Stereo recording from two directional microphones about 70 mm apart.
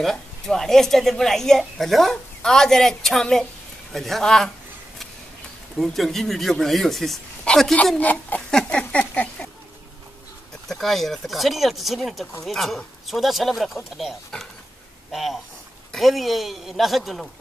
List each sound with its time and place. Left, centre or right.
0.0 s speech: centre
5.8 s a woman's voice: centre
8.0 s a sound: left
10.7 s speech: centre
14.3 s a woman's voice: centre